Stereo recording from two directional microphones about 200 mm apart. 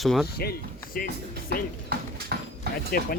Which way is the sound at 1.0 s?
45° left (ahead or behind).